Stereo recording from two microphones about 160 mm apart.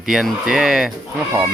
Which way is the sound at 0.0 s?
5° right (ahead or behind).